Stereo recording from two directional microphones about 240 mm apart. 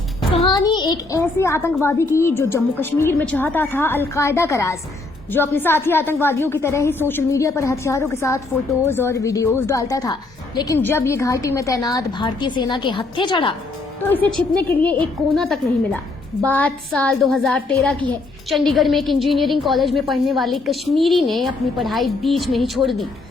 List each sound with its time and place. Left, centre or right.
0.3 s a child's voice: centre
14.1 s a woman's voice: centre